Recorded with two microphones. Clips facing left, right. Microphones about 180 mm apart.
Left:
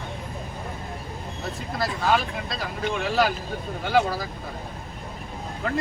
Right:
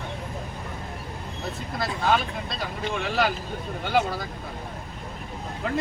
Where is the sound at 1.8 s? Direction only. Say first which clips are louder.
Left 1 dB; centre (ahead or behind).